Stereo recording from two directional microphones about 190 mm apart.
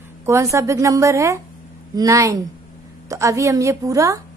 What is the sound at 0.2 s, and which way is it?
A woman's voice, 15° right (ahead or behind).